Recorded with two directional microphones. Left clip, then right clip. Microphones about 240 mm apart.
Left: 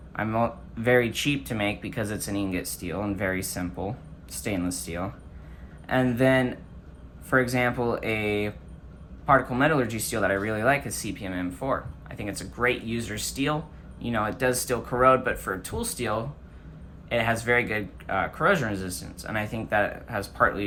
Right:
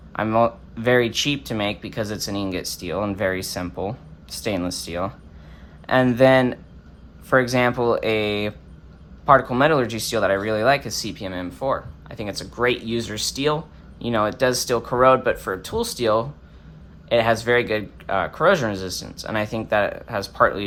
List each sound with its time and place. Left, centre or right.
0.1 s speech: centre